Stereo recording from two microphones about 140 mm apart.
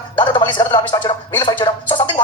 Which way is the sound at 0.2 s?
35° left (ahead or behind).